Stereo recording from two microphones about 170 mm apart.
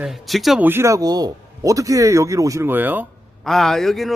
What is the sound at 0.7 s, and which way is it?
Speech, 15° right (ahead or behind).